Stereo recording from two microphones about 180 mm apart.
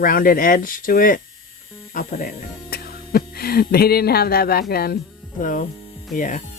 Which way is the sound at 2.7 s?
60° left (ahead or behind).